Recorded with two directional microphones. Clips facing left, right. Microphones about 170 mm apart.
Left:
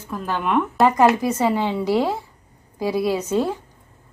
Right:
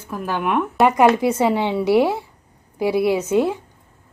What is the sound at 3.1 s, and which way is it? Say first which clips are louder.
Speech: right 3 dB; 10° right (ahead or behind).